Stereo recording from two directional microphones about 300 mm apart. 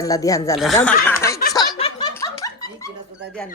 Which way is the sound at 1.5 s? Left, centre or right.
Centre.